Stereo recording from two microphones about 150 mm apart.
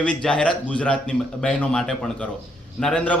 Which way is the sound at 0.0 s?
5° left (ahead or behind).